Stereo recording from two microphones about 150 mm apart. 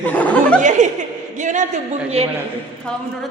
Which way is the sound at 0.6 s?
55° right (ahead or behind).